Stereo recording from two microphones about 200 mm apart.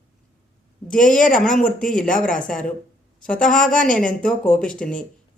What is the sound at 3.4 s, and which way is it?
Speech, 40° left (ahead or behind).